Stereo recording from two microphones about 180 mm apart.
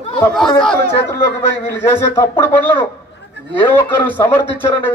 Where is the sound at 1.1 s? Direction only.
15° left (ahead or behind).